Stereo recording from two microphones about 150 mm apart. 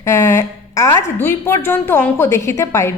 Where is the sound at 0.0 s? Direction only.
20° left (ahead or behind).